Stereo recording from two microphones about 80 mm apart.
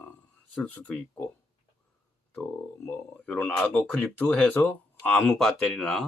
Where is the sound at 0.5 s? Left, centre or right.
Centre.